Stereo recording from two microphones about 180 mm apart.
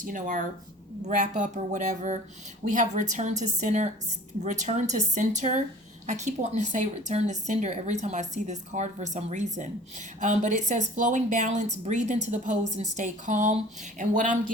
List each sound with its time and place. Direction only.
0.0 s a woman's voice: 45° right (ahead or behind)